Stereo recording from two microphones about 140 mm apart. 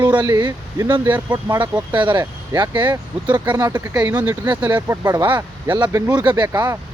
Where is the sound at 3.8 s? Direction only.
15° right (ahead or behind).